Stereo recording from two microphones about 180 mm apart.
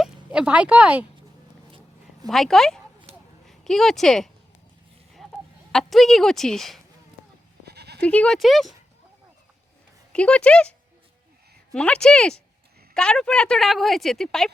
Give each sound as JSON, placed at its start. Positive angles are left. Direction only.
{"t": 0.0, "sound": "speech", "side_deg": -5}
{"t": 2.2, "sound": "speech", "side_deg": 0}
{"t": 5.7, "sound": "speech", "side_deg": 0}
{"t": 7.6, "sound": "bleat", "side_deg": -65}
{"t": 8.0, "sound": "speech", "side_deg": 5}
{"t": 10.1, "sound": "speech", "side_deg": 5}